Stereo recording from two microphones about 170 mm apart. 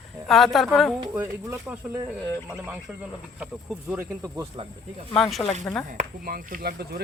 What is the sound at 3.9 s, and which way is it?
Speech, 15° right (ahead or behind).